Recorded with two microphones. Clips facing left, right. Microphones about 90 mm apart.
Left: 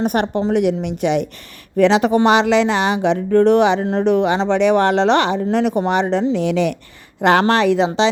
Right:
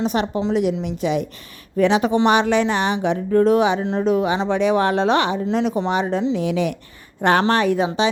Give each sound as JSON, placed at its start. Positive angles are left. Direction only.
{"t": 0.0, "sound": "speech", "side_deg": 55}
{"t": 1.7, "sound": "speech", "side_deg": 85}
{"t": 7.2, "sound": "speech", "side_deg": 90}
{"t": 7.9, "sound": "a woman's voice", "side_deg": 80}